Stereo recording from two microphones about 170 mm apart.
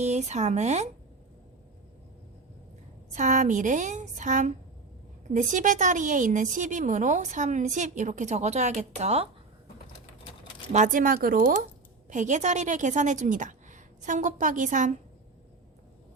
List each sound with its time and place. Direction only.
0.0 s speech: 40° right (ahead or behind)
3.2 s a woman's voice: 45° right (ahead or behind)
10.7 s a woman's voice: 45° right (ahead or behind)